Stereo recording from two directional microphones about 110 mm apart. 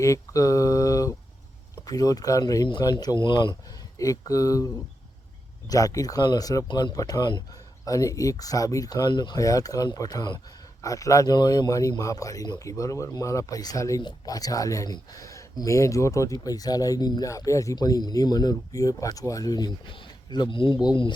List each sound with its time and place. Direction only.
0.0 s speech: 30° left (ahead or behind)
3.9 s speech: 30° left (ahead or behind)
6.7 s speech: 45° left (ahead or behind)
6.9 s speech: 35° left (ahead or behind)